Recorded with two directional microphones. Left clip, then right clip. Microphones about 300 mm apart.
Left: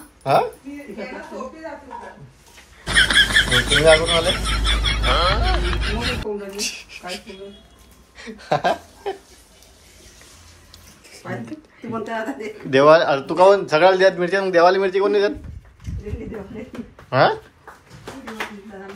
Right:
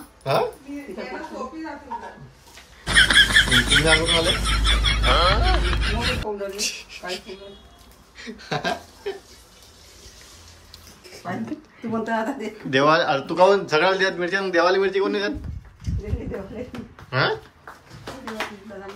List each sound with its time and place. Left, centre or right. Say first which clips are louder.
0.2 s speech: left 4 dB; centre
2.8 s speech: even; centre
8.2 s a sound: left 7 dB; centre
11.1 s a sound: right 1 dB; right
12.6 s speech: left 5 dB; centre
17.1 s speech: left 6 dB; centre